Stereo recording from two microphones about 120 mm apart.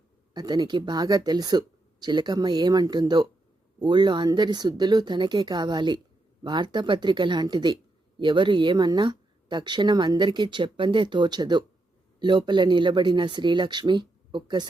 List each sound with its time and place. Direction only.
0.3 s speech: 35° right (ahead or behind)